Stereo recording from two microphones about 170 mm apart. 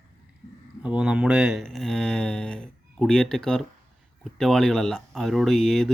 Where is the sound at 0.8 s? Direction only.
5° right (ahead or behind).